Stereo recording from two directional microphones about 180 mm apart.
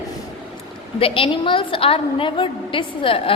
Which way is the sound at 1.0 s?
30° left (ahead or behind).